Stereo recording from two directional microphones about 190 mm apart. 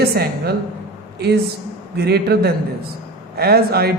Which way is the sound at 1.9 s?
60° right (ahead or behind).